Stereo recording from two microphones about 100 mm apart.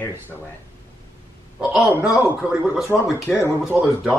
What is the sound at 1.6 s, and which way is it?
Speech, 10° right (ahead or behind).